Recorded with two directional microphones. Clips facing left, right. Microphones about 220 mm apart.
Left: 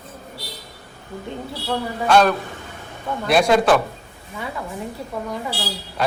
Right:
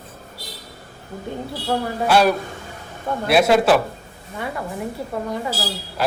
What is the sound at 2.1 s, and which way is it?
A man's voice, 10° right (ahead or behind).